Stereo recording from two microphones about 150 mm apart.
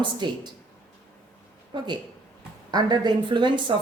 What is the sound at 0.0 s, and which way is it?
Speech, 30° right (ahead or behind).